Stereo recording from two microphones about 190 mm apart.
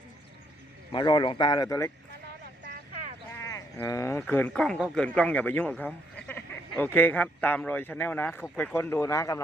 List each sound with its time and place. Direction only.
0.9 s speech: 25° left (ahead or behind)
3.3 s speech: 15° left (ahead or behind)
6.2 s a sound: 10° left (ahead or behind)
6.9 s speech: 10° left (ahead or behind)